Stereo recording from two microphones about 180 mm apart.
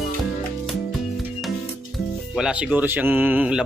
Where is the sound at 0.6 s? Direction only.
Centre (ahead or behind).